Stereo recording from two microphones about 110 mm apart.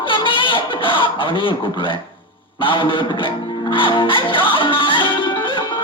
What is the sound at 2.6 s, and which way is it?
Music, 50° left (ahead or behind).